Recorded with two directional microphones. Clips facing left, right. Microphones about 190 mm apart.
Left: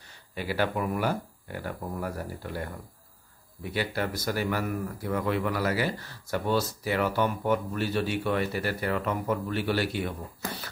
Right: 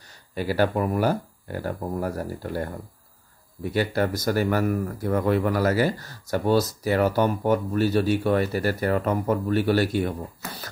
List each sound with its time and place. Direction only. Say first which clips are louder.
0.3 s speech: right 6 dB; 40° right (ahead or behind)
3.7 s speech: right 6 dB; 45° right (ahead or behind)